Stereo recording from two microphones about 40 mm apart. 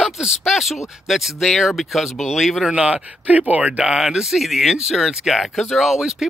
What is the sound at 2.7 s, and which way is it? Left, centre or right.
Speech, right.